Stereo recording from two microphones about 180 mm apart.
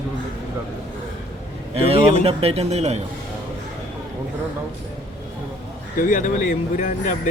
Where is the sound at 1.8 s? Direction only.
35° right (ahead or behind).